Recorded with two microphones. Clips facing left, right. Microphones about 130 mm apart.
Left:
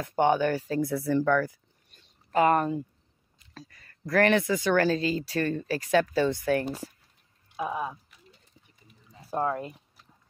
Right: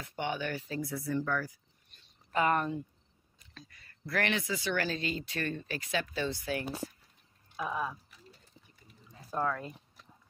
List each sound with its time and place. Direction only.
0.0 s speech: 45° left (ahead or behind)
0.9 s speech: 75° left (ahead or behind); by 2.0 s 60° left (ahead or behind)
2.3 s speech: 35° left (ahead or behind); by 6.6 s 50° left (ahead or behind)
7.6 s speech: 20° left (ahead or behind)
9.2 s a sound: 30° left (ahead or behind)